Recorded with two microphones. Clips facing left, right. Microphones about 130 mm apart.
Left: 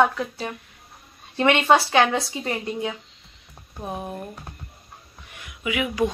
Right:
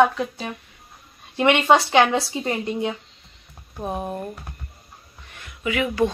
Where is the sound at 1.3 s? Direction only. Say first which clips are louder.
Right 1 dB; 15° right (ahead or behind).